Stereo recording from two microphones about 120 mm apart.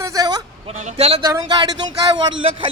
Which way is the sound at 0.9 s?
60° right (ahead or behind).